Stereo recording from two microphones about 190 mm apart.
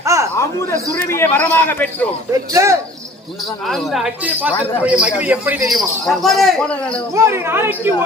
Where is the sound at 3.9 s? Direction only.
5° right (ahead or behind).